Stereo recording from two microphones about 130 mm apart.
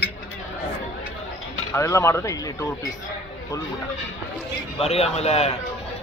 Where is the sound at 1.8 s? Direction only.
20° left (ahead or behind).